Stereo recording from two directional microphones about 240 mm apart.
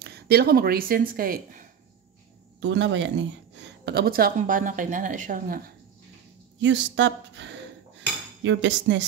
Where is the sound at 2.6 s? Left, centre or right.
Right.